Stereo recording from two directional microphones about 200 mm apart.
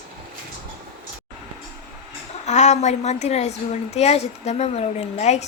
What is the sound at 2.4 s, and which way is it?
A woman's voice, 35° left (ahead or behind).